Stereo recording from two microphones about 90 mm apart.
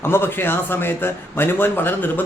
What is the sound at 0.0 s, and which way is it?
A man's voice, 25° left (ahead or behind).